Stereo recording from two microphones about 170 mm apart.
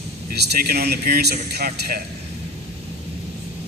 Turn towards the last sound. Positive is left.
turn(degrees=-65)  # may be behind; listen again after turning